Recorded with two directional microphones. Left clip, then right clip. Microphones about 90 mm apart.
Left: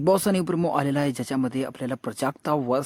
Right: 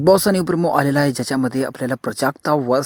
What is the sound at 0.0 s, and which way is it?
Speech, 55° right (ahead or behind).